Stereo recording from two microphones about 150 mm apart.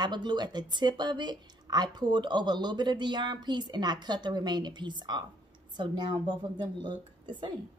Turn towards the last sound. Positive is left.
turn(degrees=-30)  # may be behind; listen again after turning